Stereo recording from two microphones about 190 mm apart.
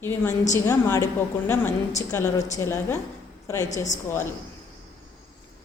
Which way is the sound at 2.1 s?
15° left (ahead or behind).